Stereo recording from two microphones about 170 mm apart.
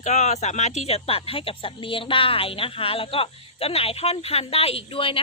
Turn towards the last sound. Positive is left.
turn(degrees=30)  # may be behind; listen again after turning